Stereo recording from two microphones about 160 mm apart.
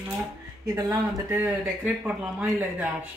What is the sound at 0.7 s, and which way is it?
Speech, 15° right (ahead or behind).